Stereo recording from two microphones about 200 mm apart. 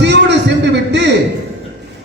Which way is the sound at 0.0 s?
60° right (ahead or behind).